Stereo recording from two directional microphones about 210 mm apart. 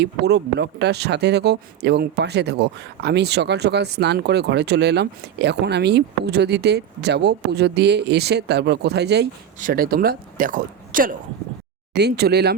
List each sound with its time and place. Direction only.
0.0 s speech: 50° right (ahead or behind)